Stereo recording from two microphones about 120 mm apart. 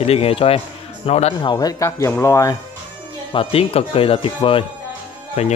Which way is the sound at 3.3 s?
50° left (ahead or behind).